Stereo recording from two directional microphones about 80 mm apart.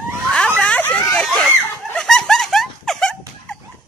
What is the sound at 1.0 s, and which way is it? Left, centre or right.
Screaming, centre.